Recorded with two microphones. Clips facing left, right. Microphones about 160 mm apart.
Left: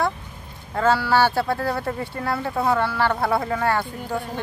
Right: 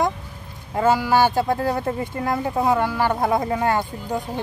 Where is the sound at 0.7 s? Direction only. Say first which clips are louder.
Right 1 dB; 15° right (ahead or behind).